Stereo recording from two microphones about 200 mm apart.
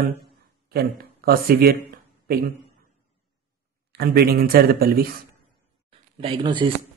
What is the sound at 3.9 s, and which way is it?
Speech, 50° right (ahead or behind).